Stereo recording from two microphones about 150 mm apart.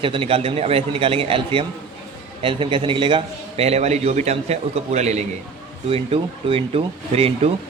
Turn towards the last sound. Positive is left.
turn(degrees=-40)  # may be behind; listen again after turning